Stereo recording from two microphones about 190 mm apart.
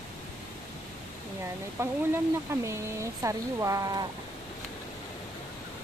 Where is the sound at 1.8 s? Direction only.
15° right (ahead or behind).